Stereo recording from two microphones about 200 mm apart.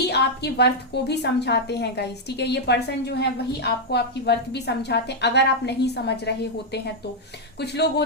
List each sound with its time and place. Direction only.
0.1 s a woman's voice: 55° left (ahead or behind)
7.6 s a woman's voice: 55° left (ahead or behind)